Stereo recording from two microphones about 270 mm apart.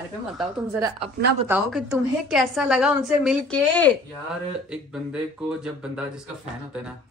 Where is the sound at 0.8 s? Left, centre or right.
Centre.